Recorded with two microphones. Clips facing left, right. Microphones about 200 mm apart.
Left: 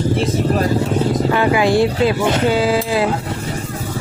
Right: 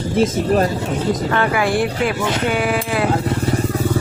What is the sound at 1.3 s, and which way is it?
Speech, 15° left (ahead or behind).